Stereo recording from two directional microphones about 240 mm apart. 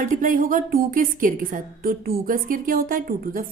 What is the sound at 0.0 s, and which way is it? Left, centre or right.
A woman's voice, right.